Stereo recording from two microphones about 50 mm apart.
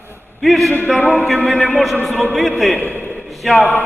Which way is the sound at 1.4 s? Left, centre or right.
Left.